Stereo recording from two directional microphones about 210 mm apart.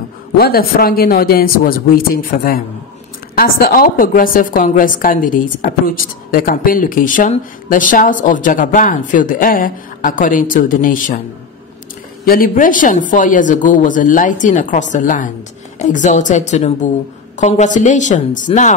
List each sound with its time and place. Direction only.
0.4 s a woman's voice: 45° left (ahead or behind)
12.3 s a woman's voice: 40° left (ahead or behind)